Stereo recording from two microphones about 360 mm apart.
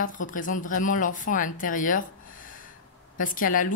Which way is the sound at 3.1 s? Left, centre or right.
Left.